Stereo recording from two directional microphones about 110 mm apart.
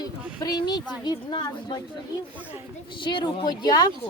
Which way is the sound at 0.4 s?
40° left (ahead or behind).